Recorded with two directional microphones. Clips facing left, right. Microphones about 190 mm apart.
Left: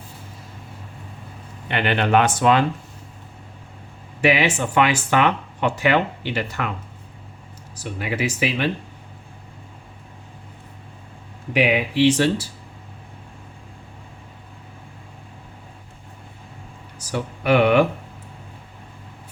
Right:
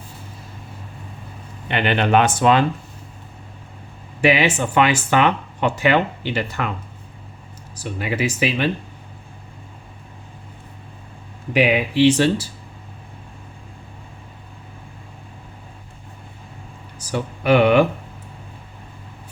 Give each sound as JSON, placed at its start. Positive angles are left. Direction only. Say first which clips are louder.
{"t": 1.6, "sound": "speech", "louder": "right 2 dB", "side_deg": -20}
{"t": 4.2, "sound": "speech", "louder": "right 2 dB", "side_deg": -25}
{"t": 7.8, "sound": "speech", "louder": "right 2 dB", "side_deg": -30}
{"t": 11.5, "sound": "speech", "louder": "right 2 dB", "side_deg": -30}
{"t": 17.1, "sound": "speech", "louder": "right 2 dB", "side_deg": -25}